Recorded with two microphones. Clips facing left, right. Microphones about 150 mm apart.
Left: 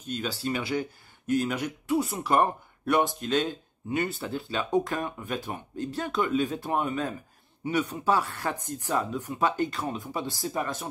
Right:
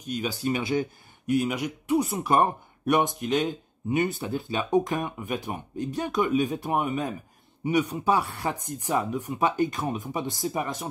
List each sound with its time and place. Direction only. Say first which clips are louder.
0.0 s speech: right 3 dB; 10° right (ahead or behind)